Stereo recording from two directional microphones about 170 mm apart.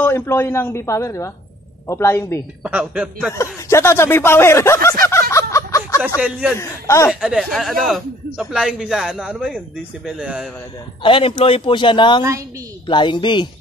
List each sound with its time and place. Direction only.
0.0 s speech: 10° left (ahead or behind)
2.6 s speech: 5° right (ahead or behind)
3.3 s speech: 15° left (ahead or behind)
5.3 s a sound: 20° left (ahead or behind)
5.9 s speech: 5° right (ahead or behind)
6.5 s speech: 15° left (ahead or behind)
7.1 s a man's voice: 5° right (ahead or behind)
11.0 s a man's voice: 30° left (ahead or behind)
12.2 s a woman's voice: 20° right (ahead or behind)
12.8 s a man's voice: 25° left (ahead or behind)